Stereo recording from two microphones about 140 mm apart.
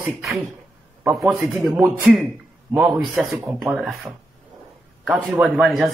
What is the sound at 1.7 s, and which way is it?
Speech, 20° right (ahead or behind).